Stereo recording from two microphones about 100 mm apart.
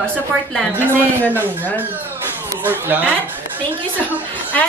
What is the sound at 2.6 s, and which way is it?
Speech, 20° right (ahead or behind).